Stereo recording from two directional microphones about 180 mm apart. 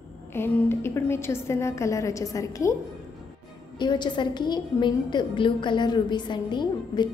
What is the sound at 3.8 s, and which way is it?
A woman's voice, 25° left (ahead or behind).